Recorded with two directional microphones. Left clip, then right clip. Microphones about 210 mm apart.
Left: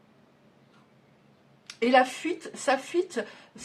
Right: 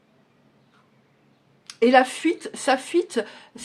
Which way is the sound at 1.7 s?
35° right (ahead or behind).